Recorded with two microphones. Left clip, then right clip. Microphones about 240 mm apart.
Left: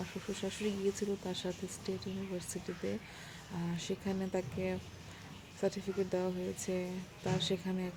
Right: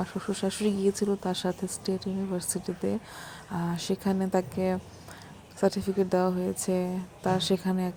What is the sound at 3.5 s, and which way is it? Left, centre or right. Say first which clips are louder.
Speech: right 9 dB; centre.